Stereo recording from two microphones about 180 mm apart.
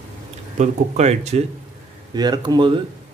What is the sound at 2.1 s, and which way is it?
Speech, 25° right (ahead or behind).